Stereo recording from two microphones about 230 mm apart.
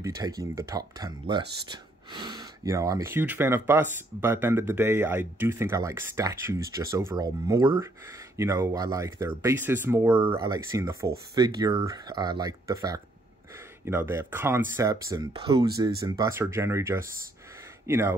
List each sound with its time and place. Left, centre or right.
0.0 s speech: centre